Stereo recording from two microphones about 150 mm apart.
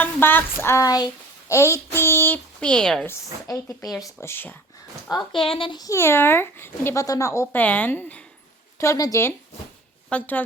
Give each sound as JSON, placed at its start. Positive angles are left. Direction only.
{"t": 0.0, "sound": "speech", "side_deg": 15}
{"t": 3.1, "sound": "speech", "side_deg": 20}
{"t": 5.1, "sound": "speech", "side_deg": 35}
{"t": 10.1, "sound": "speech", "side_deg": 10}